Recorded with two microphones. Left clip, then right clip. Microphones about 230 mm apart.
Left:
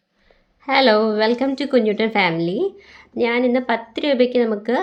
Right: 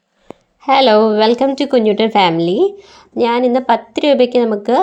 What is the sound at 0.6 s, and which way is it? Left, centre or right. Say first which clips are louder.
A woman's voice: right 5 dB; right.